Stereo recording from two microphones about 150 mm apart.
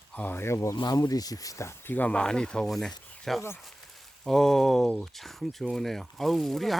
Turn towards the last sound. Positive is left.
turn(degrees=0)  # may be behind; listen again after turning